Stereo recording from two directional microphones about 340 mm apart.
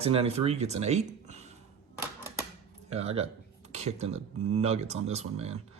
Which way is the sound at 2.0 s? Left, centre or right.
Centre.